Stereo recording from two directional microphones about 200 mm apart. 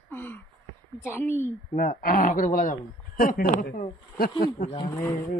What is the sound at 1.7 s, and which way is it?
Speech, 45° left (ahead or behind).